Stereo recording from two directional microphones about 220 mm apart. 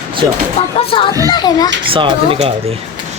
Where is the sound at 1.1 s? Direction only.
15° right (ahead or behind).